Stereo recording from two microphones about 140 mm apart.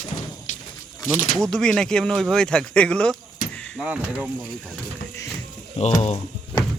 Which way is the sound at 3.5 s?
10° left (ahead or behind).